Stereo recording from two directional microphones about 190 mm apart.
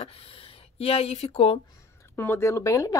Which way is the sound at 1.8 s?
15° left (ahead or behind).